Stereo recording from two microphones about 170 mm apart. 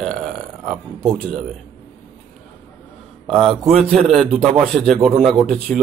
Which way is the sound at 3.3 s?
35° right (ahead or behind).